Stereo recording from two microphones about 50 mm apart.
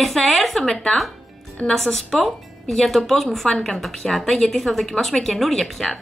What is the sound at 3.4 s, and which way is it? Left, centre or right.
Speech, centre.